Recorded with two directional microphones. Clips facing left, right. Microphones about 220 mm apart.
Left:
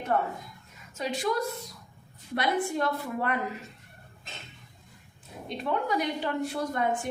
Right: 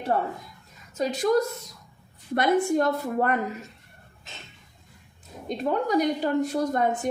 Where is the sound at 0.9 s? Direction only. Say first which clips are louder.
Right 7 dB; 40° right (ahead or behind).